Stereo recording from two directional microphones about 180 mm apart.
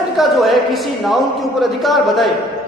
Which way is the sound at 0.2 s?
Centre (ahead or behind).